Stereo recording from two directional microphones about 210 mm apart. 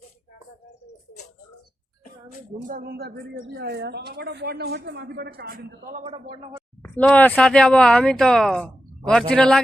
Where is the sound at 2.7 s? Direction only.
45° right (ahead or behind).